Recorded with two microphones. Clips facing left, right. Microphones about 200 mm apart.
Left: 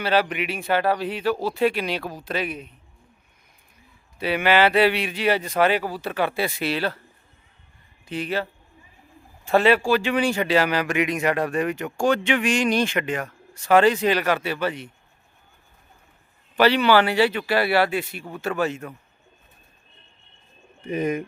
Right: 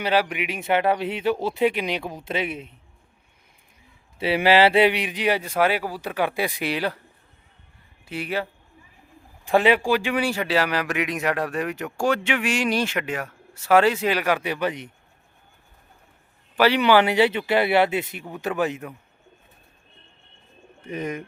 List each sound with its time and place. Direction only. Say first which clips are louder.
0.0 s speech: left 1 dB; 10° right (ahead or behind)
4.2 s speech: right 2 dB; 30° right (ahead or behind); by 7.0 s 15° right (ahead or behind)
8.0 s speech: left 1 dB; 10° right (ahead or behind)
16.6 s speech: even; 10° right (ahead or behind)
20.8 s speech: left 5 dB; 10° left (ahead or behind)